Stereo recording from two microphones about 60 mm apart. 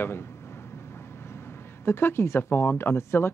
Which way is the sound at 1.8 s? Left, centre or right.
Left.